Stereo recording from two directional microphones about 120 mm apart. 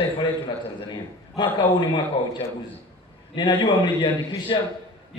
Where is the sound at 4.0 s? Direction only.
45° left (ahead or behind).